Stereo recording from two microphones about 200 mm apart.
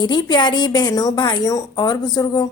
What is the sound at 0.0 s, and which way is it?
A woman's voice, 20° left (ahead or behind).